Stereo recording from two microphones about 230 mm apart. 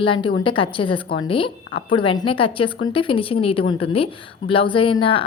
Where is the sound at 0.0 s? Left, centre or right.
Left.